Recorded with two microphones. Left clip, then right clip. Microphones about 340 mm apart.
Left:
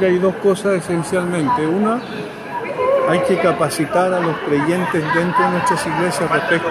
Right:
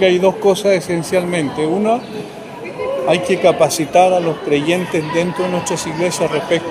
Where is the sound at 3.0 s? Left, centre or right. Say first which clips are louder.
Right 2 dB; right.